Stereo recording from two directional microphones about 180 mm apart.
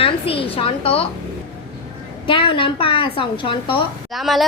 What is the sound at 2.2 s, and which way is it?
A woman's voice, 30° left (ahead or behind).